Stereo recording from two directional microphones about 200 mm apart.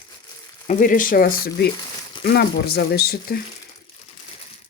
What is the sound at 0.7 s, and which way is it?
Speech, 40° left (ahead or behind).